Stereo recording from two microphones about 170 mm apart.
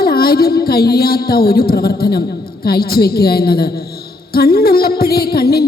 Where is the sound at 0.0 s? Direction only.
65° left (ahead or behind).